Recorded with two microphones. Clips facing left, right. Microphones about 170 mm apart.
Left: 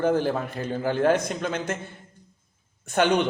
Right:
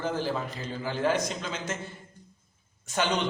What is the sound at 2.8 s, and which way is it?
Speech, 60° left (ahead or behind).